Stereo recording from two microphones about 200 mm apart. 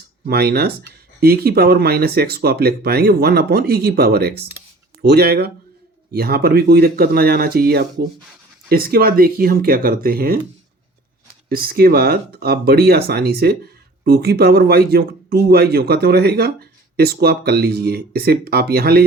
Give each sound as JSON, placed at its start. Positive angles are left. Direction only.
{"t": 0.3, "sound": "a man's voice", "side_deg": -50}
{"t": 11.4, "sound": "a man's voice", "side_deg": -50}